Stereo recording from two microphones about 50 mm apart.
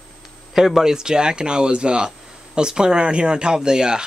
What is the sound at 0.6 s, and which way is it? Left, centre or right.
Speech, centre.